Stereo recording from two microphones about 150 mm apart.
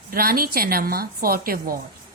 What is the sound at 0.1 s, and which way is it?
A woman's voice, 80° right.